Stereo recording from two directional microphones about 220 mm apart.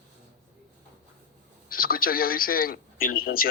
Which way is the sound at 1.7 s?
40° left (ahead or behind).